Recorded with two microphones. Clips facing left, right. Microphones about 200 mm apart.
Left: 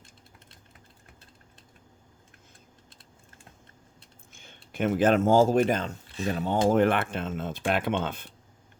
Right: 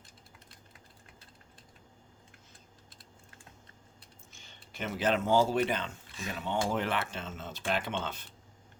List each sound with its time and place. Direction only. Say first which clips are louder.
4.3 s speech: left 8 dB; 55° left (ahead or behind); by 6.6 s 40° left (ahead or behind)
6.7 s speech: left 10 dB; 50° left (ahead or behind)